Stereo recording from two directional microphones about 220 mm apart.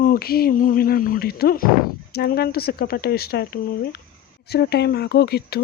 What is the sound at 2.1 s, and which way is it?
Speech, 45° left (ahead or behind).